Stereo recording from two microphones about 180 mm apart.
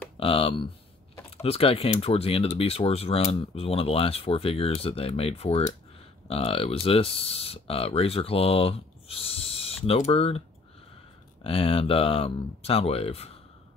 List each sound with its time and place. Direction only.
0.2 s speech: 30° left (ahead or behind)
11.4 s speech: 30° left (ahead or behind)